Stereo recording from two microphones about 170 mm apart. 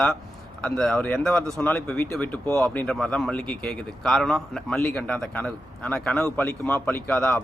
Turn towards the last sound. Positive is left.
turn(degrees=10)  # may be behind; listen again after turning